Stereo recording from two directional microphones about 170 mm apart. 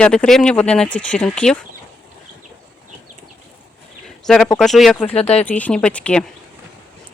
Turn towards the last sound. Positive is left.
turn(degrees=5)  # may be behind; listen again after turning